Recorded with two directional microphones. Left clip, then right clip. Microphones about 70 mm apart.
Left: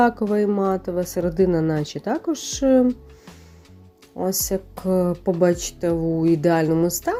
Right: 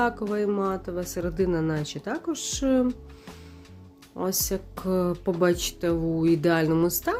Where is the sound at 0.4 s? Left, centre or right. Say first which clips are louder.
Left 5 dB; left.